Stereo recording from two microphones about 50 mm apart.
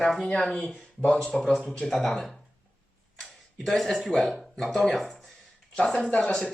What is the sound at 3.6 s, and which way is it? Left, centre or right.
Speech, centre.